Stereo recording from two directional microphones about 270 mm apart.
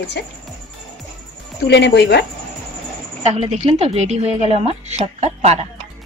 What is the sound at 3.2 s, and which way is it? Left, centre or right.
A woman's voice, right.